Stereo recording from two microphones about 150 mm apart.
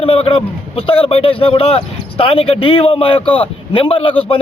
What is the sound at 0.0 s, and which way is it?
Speech, 40° left (ahead or behind).